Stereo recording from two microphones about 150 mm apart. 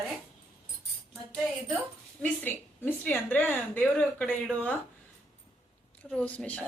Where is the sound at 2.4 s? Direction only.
15° left (ahead or behind).